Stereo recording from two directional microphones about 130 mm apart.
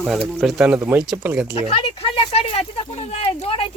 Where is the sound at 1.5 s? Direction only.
45° left (ahead or behind).